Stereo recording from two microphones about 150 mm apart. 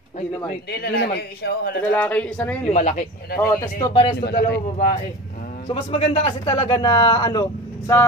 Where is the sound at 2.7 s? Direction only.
50° left (ahead or behind).